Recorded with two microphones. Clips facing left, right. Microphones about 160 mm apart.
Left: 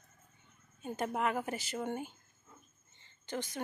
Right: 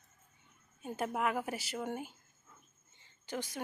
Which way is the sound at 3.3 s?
5° right (ahead or behind).